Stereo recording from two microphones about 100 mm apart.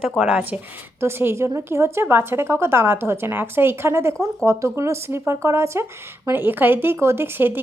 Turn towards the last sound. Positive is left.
turn(degrees=-20)  # may be behind; listen again after turning